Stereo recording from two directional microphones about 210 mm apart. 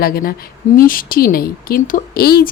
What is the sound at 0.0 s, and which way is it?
A woman's voice, 45° left (ahead or behind).